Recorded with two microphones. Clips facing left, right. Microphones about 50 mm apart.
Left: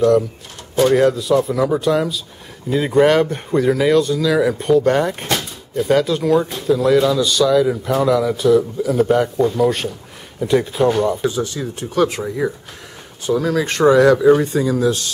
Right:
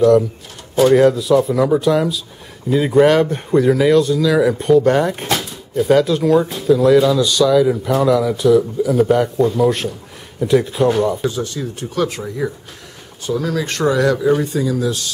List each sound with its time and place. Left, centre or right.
0.7 s speech: centre